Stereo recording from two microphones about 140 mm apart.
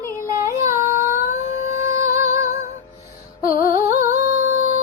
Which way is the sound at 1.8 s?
20° right (ahead or behind).